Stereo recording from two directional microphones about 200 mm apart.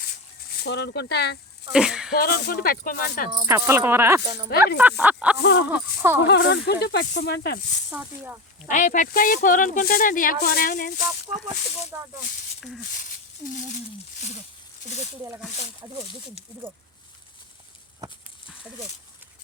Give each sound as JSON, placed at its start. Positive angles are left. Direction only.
{"t": 0.5, "sound": "speech", "side_deg": 55}
{"t": 1.7, "sound": "speech", "side_deg": -5}
{"t": 2.1, "sound": "speech", "side_deg": 50}
{"t": 3.3, "sound": "speech", "side_deg": -15}
{"t": 4.2, "sound": "speech", "side_deg": -20}
{"t": 4.8, "sound": "speech", "side_deg": -10}
{"t": 5.4, "sound": "speech", "side_deg": 60}
{"t": 5.6, "sound": "speech", "side_deg": -10}
{"t": 6.2, "sound": "speech", "side_deg": 60}
{"t": 7.9, "sound": "speech", "side_deg": -10}
{"t": 8.6, "sound": "speech", "side_deg": 40}
{"t": 11.9, "sound": "speech", "side_deg": -15}
{"t": 12.9, "sound": "a sound", "side_deg": 40}
{"t": 14.8, "sound": "speech", "side_deg": 35}